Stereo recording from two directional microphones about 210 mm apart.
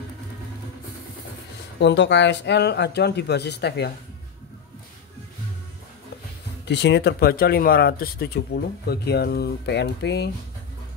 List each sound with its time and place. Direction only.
1.8 s speech: 55° left (ahead or behind)
6.6 s speech: 55° left (ahead or behind)